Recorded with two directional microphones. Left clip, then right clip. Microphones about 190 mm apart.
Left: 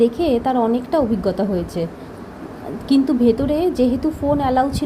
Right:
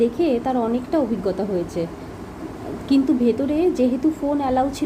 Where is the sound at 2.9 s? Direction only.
15° left (ahead or behind).